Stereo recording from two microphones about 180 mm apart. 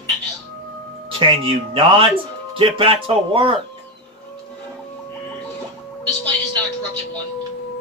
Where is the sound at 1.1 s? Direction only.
30° right (ahead or behind).